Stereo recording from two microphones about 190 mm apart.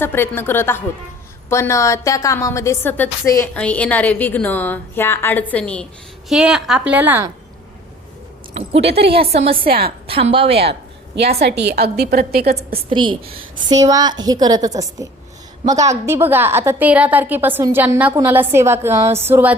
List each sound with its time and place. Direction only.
0.0 s a woman's voice: 10° left (ahead or behind); by 7.3 s 10° right (ahead or behind)
9.3 s a woman's voice: 30° right (ahead or behind)
10.6 s a sound: 60° right (ahead or behind)
11.3 s a woman's voice: 60° right (ahead or behind)
12.9 s a woman's voice: 25° right (ahead or behind); by 19.5 s 10° right (ahead or behind)